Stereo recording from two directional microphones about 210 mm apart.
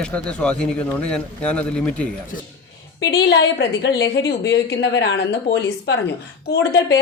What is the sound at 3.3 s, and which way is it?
A woman's voice, 55° left (ahead or behind).